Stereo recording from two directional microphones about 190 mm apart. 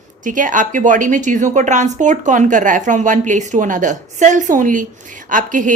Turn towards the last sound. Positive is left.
turn(degrees=-40)  # may be behind; listen again after turning